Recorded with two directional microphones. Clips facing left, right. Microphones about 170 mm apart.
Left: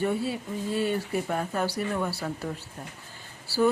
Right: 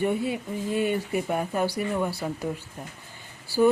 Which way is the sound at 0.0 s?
15° right (ahead or behind).